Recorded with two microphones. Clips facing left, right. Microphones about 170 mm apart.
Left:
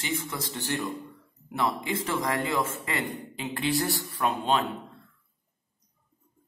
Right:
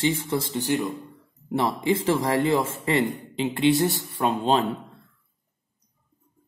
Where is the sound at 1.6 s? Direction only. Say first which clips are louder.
Right 5 dB; 30° right (ahead or behind).